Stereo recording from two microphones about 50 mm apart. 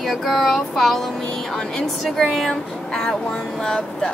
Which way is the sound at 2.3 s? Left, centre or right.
Centre.